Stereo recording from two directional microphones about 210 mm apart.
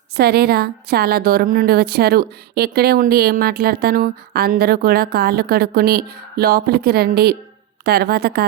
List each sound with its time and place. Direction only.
0.2 s a woman's voice: 50° right (ahead or behind)